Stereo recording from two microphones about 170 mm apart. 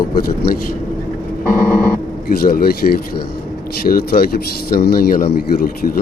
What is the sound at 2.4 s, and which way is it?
Speech, 60° left (ahead or behind).